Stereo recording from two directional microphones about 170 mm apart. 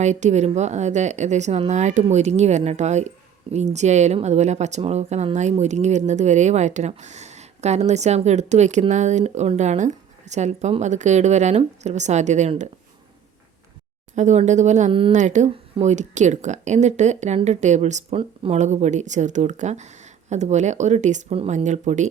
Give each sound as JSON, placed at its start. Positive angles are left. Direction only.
{"t": 0.0, "sound": "speech", "side_deg": -45}
{"t": 14.2, "sound": "speech", "side_deg": -45}